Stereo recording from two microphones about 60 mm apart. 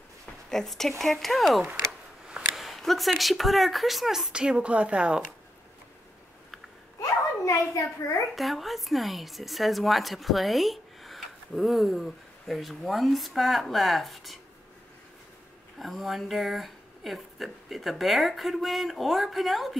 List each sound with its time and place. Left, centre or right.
0.5 s a woman's voice: centre
4.3 s speech: centre
7.0 s a sound: left
8.4 s a woman's voice: centre
15.8 s a woman's voice: centre